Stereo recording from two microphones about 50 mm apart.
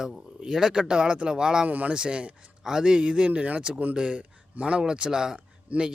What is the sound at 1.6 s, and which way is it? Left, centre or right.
Speech, right.